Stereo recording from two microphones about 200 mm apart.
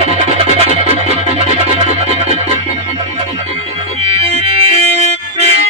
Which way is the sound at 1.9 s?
30° right (ahead or behind).